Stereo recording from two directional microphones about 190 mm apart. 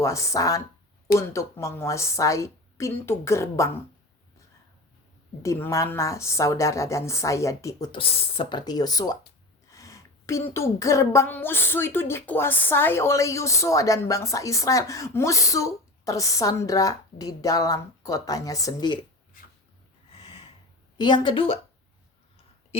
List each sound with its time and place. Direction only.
0.0 s speech: 15° left (ahead or behind)
5.4 s speech: 15° left (ahead or behind)
7.9 s speech: 30° left (ahead or behind)
9.6 s a sound: 15° left (ahead or behind)
10.5 s speech: 15° left (ahead or behind)
20.1 s snort: 30° left (ahead or behind)
21.0 s speech: 25° left (ahead or behind)